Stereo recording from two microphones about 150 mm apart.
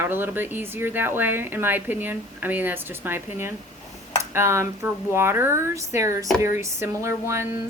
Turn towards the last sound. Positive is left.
turn(degrees=-20)  # may be behind; listen again after turning